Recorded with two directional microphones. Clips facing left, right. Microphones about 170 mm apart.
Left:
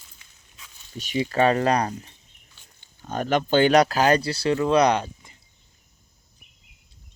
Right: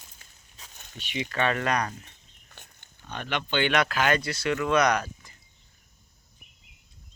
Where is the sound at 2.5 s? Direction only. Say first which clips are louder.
Right 8 dB; 55° right (ahead or behind).